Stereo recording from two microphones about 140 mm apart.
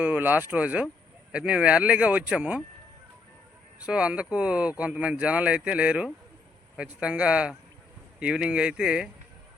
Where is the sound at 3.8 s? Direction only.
10° right (ahead or behind).